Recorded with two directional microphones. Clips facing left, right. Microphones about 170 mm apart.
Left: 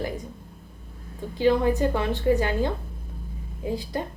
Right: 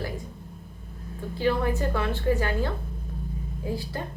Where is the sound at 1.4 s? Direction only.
15° left (ahead or behind).